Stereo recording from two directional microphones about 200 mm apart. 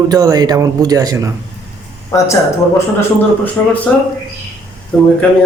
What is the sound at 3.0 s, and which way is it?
Speech, 10° left (ahead or behind).